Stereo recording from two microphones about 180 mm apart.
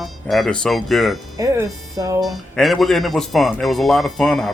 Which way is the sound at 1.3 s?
15° right (ahead or behind).